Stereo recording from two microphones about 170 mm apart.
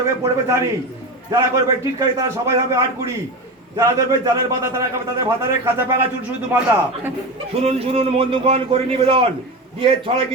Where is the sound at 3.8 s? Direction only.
20° right (ahead or behind).